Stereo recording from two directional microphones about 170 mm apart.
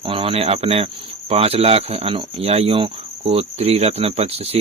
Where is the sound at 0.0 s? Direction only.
35° right (ahead or behind).